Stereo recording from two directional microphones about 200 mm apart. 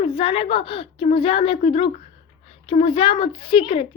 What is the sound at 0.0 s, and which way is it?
Speech, 30° left (ahead or behind).